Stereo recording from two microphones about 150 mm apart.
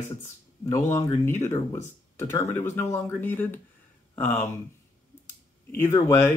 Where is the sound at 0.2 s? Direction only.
20° left (ahead or behind).